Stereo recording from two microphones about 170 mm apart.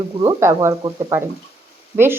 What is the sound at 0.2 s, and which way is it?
Speech, 20° right (ahead or behind).